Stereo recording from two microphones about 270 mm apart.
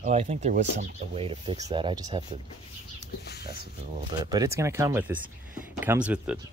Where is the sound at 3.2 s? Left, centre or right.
Left.